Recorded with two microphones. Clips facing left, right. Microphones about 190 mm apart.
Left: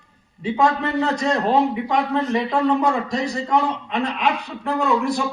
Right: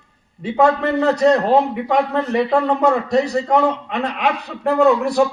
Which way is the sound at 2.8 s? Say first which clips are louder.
Right 5 dB; 65° right (ahead or behind).